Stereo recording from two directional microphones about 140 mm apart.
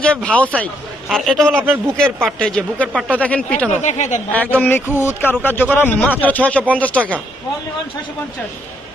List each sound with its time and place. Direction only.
0.0 s a man's voice: 10° left (ahead or behind)
3.8 s a woman's voice: 60° left (ahead or behind)
4.3 s a man's voice: 10° left (ahead or behind)